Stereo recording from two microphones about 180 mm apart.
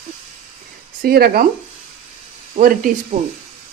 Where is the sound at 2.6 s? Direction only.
45° right (ahead or behind).